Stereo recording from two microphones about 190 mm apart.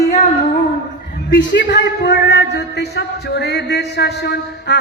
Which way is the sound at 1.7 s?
60° left (ahead or behind).